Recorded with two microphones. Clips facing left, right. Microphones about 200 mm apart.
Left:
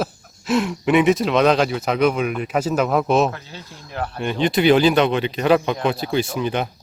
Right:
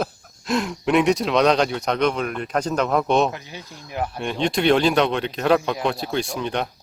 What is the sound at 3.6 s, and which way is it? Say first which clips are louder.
Speech: even; centre (ahead or behind).